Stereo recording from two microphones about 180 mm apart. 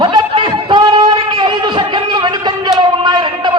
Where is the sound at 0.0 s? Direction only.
25° right (ahead or behind).